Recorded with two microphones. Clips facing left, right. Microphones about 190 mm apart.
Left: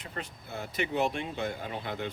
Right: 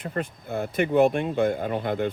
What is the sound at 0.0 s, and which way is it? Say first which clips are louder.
Speech: right 10 dB; 50° right (ahead or behind).